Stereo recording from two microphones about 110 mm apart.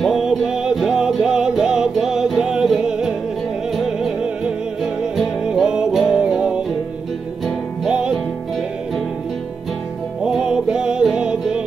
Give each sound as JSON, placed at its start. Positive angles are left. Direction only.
{"t": 0.0, "sound": "music", "side_deg": 0}
{"t": 10.2, "sound": "music", "side_deg": -5}